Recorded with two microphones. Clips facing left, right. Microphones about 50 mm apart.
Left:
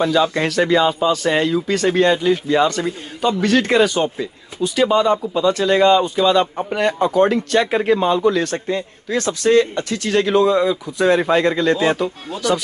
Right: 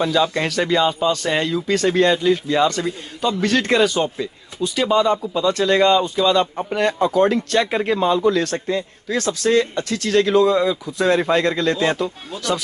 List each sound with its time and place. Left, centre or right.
0.0 s speech: centre
3.3 s speech: centre
6.1 s speech: left
7.5 s speech: centre
8.0 s speech: centre
8.6 s a man's voice: left
10.0 s speech: left